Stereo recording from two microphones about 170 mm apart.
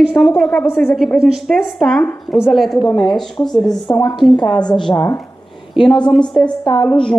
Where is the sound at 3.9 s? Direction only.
25° left (ahead or behind).